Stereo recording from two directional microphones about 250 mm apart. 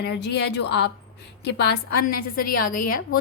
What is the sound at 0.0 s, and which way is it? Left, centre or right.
Speech, left.